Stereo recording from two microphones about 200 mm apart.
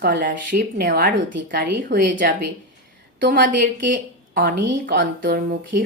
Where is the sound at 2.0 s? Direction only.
40° right (ahead or behind).